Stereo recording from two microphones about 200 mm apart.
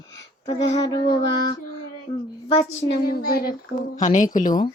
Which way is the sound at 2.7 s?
55° left (ahead or behind).